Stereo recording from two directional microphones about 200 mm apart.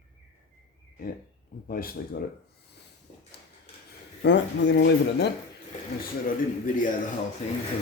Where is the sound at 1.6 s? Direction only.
45° left (ahead or behind).